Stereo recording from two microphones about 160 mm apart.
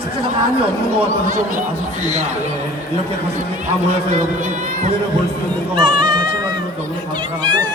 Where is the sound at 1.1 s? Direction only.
50° right (ahead or behind).